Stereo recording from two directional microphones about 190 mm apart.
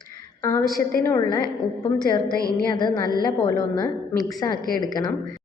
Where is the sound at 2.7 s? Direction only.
25° left (ahead or behind).